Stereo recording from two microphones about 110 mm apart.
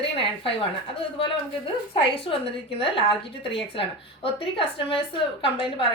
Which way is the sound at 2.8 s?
55° left (ahead or behind).